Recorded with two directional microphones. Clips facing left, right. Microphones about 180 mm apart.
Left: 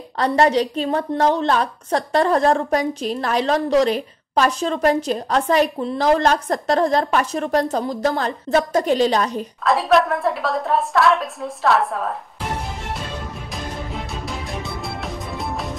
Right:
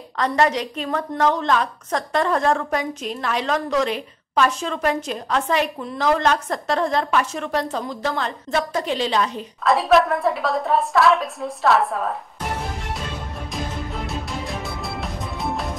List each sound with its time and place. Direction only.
0.2 s a woman's voice: 35° left (ahead or behind)
9.6 s a woman's voice: centre (ahead or behind)
14.0 s music: centre (ahead or behind)